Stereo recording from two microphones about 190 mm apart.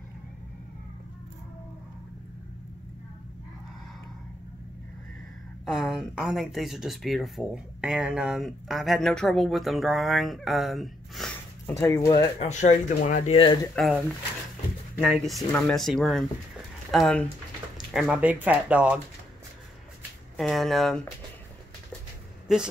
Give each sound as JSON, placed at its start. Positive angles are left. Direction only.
{"t": 5.7, "sound": "speech", "side_deg": 0}
{"t": 11.6, "sound": "speech", "side_deg": 15}
{"t": 12.4, "sound": "speech", "side_deg": 40}
{"t": 13.8, "sound": "speech", "side_deg": 5}
{"t": 15.0, "sound": "speech", "side_deg": 0}
{"t": 20.3, "sound": "speech", "side_deg": 0}
{"t": 22.5, "sound": "speech", "side_deg": -5}